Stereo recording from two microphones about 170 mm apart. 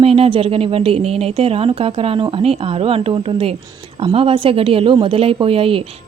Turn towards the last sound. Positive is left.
turn(degrees=-35)  # may be behind; listen again after turning